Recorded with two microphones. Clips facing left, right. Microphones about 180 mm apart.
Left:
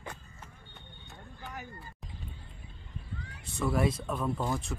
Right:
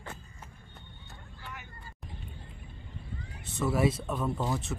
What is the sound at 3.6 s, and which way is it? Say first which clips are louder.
Speech: right 2 dB; 5° right (ahead or behind).